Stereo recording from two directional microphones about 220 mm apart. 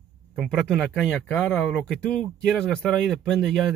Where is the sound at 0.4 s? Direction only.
Centre (ahead or behind).